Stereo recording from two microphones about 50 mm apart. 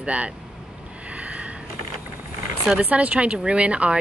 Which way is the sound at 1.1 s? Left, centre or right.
Right.